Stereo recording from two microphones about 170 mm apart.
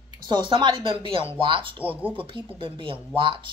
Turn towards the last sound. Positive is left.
turn(degrees=-30)  # may be behind; listen again after turning